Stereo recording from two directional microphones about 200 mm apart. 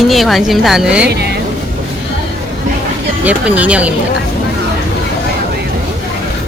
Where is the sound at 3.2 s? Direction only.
5° right (ahead or behind).